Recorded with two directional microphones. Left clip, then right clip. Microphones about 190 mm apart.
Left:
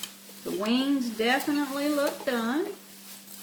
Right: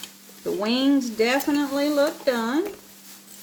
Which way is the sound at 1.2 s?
45° right (ahead or behind).